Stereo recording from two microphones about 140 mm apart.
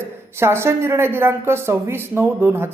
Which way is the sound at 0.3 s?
15° right (ahead or behind).